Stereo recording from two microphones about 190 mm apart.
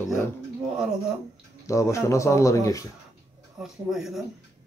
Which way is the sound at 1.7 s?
15° left (ahead or behind).